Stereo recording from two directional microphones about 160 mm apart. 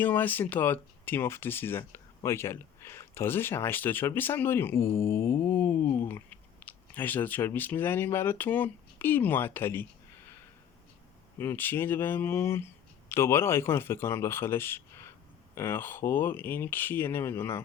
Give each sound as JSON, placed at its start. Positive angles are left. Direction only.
{"t": 0.0, "sound": "speech", "side_deg": 10}
{"t": 11.3, "sound": "speech", "side_deg": 15}